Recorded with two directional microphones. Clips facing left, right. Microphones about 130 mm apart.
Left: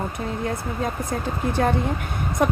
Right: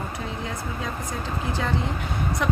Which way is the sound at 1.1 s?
55° left (ahead or behind).